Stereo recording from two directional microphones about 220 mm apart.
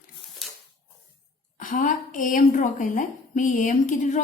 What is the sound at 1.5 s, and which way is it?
A woman's voice, 35° left (ahead or behind).